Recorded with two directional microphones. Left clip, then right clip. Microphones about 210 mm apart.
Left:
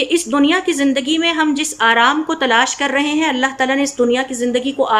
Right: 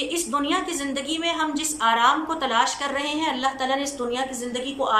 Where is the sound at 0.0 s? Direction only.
40° left (ahead or behind).